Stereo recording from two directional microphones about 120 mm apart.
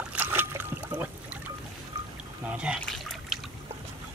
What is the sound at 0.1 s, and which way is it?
Trickle, 15° right (ahead or behind).